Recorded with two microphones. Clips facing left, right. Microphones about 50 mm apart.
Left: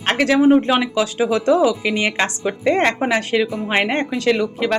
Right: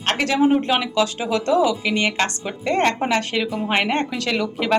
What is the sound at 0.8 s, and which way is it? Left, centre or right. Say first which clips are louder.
A woman's voice: left 3 dB; centre.